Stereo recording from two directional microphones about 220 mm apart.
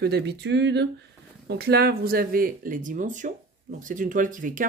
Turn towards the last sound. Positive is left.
turn(degrees=-35)  # may be behind; listen again after turning